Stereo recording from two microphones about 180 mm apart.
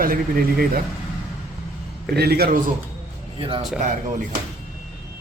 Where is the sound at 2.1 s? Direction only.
60° right (ahead or behind).